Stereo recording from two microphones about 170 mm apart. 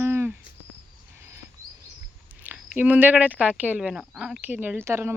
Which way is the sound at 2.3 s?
10° right (ahead or behind).